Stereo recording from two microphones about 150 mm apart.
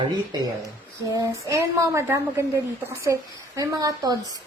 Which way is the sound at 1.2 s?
20° right (ahead or behind).